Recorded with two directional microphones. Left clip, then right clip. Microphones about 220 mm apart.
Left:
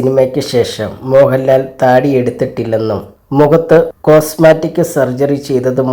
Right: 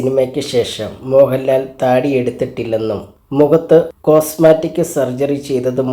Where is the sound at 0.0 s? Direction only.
20° left (ahead or behind).